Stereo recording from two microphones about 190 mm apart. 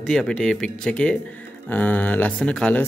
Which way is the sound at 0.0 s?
5° left (ahead or behind).